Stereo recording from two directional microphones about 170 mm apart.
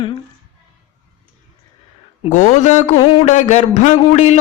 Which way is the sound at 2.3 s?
50° left (ahead or behind).